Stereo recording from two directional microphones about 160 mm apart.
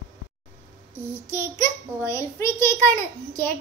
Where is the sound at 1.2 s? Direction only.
15° left (ahead or behind).